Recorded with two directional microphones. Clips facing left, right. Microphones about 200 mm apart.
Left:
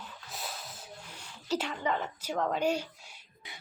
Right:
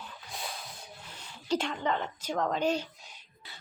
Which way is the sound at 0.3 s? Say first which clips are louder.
Right 1 dB; 5° left (ahead or behind).